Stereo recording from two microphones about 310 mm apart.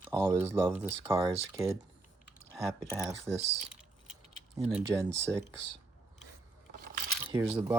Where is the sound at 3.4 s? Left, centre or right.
Right.